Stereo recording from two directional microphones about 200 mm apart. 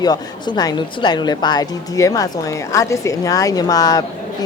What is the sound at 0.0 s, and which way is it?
A woman's voice, 20° left (ahead or behind).